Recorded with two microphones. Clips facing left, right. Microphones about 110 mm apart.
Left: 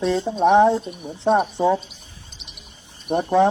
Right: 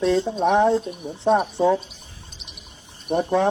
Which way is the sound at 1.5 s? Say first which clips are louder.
Even; 15° left (ahead or behind).